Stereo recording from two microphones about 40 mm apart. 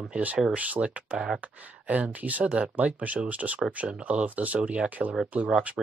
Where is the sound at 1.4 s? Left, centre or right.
Right.